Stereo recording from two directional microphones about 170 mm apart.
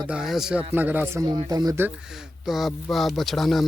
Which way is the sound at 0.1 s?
5° right (ahead or behind).